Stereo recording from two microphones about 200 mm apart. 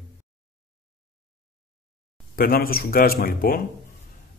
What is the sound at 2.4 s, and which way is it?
Speech, 50° left (ahead or behind).